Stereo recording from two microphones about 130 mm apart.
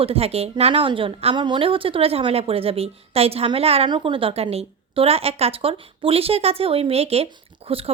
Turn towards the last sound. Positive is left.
turn(degrees=-50)  # may be behind; listen again after turning